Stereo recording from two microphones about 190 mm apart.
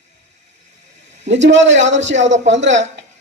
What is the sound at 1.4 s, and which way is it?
A man's voice, 70° right (ahead or behind).